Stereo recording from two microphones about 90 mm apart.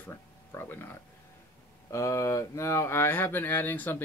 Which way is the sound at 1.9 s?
35° left (ahead or behind).